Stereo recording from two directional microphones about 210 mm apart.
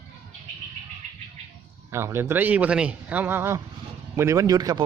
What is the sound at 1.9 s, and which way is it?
Speech, 10° right (ahead or behind).